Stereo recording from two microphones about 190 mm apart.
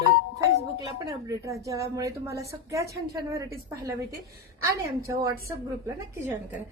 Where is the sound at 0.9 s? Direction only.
20° right (ahead or behind).